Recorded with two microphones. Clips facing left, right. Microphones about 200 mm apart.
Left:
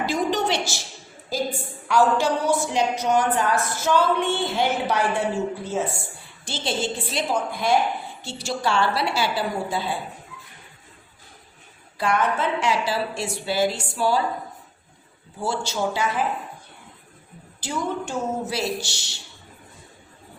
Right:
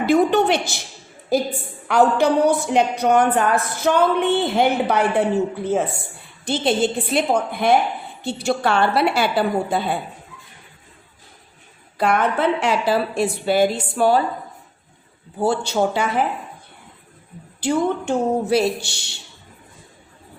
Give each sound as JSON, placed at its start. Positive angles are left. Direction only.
{"t": 0.0, "sound": "a woman's voice", "side_deg": -60}
{"t": 6.4, "sound": "a woman's voice", "side_deg": -55}
{"t": 11.9, "sound": "a woman's voice", "side_deg": -60}
{"t": 15.4, "sound": "a woman's voice", "side_deg": -60}
{"t": 17.6, "sound": "a woman's voice", "side_deg": -60}